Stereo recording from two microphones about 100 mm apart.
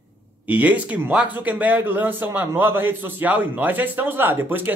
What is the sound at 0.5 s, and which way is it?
A man's voice, 15° right (ahead or behind).